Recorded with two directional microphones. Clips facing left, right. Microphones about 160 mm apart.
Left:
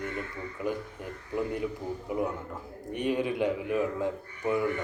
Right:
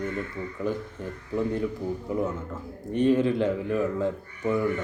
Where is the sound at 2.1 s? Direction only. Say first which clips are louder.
Right 1 dB; 15° left (ahead or behind).